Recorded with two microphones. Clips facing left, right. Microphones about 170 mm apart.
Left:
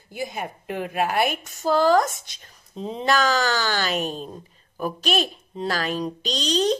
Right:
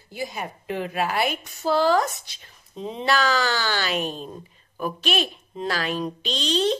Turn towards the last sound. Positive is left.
turn(degrees=40)  # may be behind; listen again after turning